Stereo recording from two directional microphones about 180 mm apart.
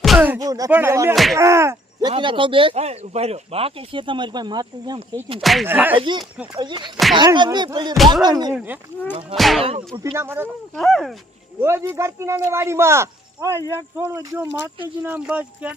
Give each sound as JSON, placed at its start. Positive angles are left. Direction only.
{"t": 0.0, "sound": "music", "side_deg": 0}
{"t": 0.3, "sound": "speech", "side_deg": -20}
{"t": 1.1, "sound": "speech", "side_deg": 0}
{"t": 1.4, "sound": "speech", "side_deg": -15}
{"t": 5.4, "sound": "speech", "side_deg": 0}
{"t": 6.0, "sound": "speech", "side_deg": -25}
{"t": 8.5, "sound": "speech", "side_deg": -10}
{"t": 9.9, "sound": "speech", "side_deg": -20}
{"t": 10.8, "sound": "speech", "side_deg": 0}
{"t": 11.6, "sound": "speech", "side_deg": -15}